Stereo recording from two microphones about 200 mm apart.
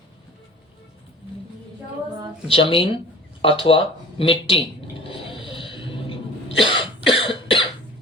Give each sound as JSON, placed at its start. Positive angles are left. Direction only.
{"t": 2.5, "sound": "speech", "side_deg": 25}
{"t": 5.0, "sound": "a sound", "side_deg": 25}
{"t": 6.7, "sound": "cough", "side_deg": 25}